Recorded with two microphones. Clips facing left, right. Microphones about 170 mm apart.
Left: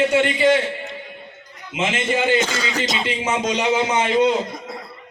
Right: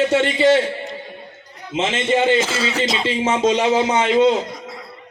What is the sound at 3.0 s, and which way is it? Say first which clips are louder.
A man's voice: right 8 dB; 25° right (ahead or behind).